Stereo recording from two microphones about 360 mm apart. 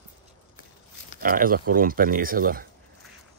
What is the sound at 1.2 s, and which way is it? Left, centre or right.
Speech, right.